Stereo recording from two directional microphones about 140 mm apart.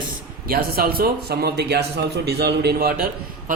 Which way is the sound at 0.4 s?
90° right.